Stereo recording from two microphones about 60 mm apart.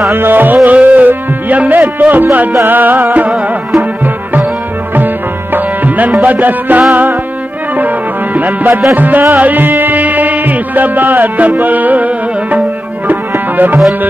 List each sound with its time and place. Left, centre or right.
0.1 s music: right
0.7 s music: right
4.9 s tabla: right
6.2 s music: right
8.4 s music: right